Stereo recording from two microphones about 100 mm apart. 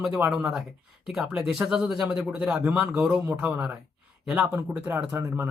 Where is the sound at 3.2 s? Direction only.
25° right (ahead or behind).